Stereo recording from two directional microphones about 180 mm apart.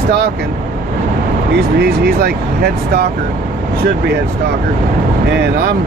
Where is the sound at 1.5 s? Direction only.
65° right (ahead or behind).